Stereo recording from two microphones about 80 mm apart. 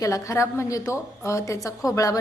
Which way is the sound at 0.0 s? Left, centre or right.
Left.